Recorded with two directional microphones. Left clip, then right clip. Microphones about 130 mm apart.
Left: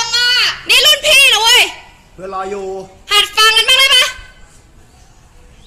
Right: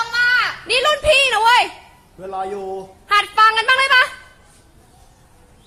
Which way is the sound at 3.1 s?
10° right (ahead or behind).